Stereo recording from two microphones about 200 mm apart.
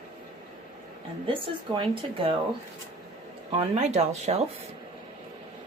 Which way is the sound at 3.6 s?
35° right (ahead or behind).